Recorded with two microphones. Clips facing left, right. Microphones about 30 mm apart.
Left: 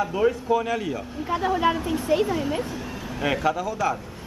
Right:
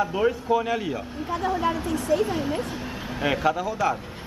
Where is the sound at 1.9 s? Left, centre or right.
Left.